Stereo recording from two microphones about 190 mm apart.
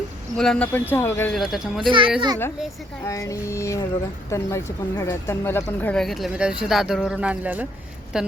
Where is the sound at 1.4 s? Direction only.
Centre (ahead or behind).